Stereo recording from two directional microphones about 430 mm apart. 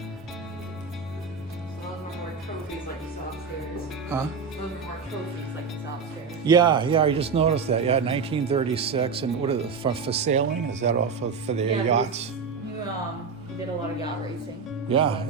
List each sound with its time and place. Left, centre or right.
6.4 s speech: centre
14.8 s speech: centre